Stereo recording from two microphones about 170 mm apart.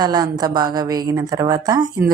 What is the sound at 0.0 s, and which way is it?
Speech, 25° right (ahead or behind).